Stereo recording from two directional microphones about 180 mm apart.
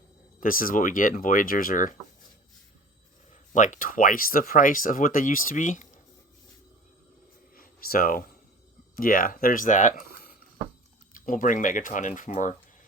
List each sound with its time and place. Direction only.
0.3 s speech: 50° left (ahead or behind)
3.5 s speech: 45° left (ahead or behind)
7.5 s a sound: 55° left (ahead or behind)
9.0 s speech: 55° left (ahead or behind)